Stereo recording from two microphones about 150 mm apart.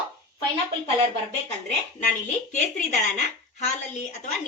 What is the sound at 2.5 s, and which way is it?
A woman's voice, 55° left (ahead or behind).